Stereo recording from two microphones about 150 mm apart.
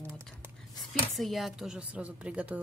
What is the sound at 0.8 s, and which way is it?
A woman's voice, centre (ahead or behind).